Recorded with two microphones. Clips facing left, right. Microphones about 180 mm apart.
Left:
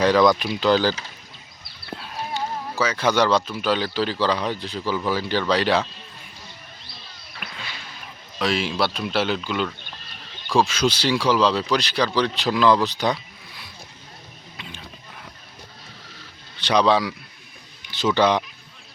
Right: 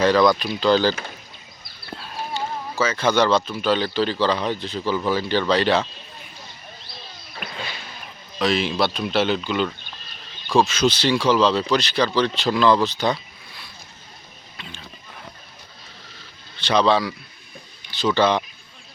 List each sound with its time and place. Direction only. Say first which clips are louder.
0.3 s speech: even; 15° left (ahead or behind)
2.3 s speech: even; 15° left (ahead or behind)
7.3 s a sound: right 5 dB; 35° right (ahead or behind)
8.4 s speech: right 2 dB; 5° left (ahead or behind)
16.6 s speech: even; 15° left (ahead or behind)